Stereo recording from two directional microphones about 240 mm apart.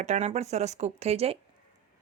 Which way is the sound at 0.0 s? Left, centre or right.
Right.